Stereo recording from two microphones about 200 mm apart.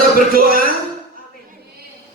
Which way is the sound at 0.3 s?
45° right (ahead or behind).